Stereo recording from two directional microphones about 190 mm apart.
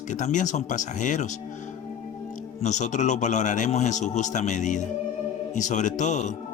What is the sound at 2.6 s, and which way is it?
Speech, 40° left (ahead or behind).